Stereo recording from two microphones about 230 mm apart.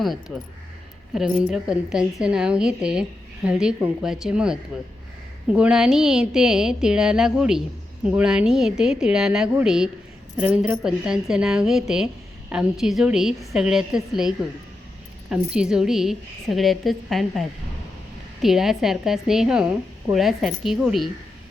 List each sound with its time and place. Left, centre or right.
0.0 s a woman's voice: centre
18.4 s a woman's voice: centre